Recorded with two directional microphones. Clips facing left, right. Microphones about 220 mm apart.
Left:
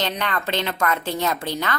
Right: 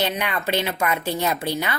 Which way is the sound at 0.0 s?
10° right (ahead or behind).